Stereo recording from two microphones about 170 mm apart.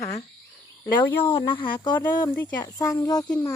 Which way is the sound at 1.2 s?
30° left (ahead or behind).